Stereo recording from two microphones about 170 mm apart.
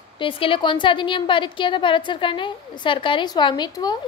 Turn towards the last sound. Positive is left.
turn(degrees=25)  # may be behind; listen again after turning